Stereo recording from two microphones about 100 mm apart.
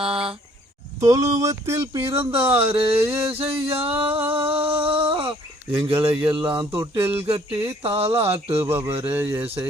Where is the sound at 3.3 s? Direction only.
75° right (ahead or behind).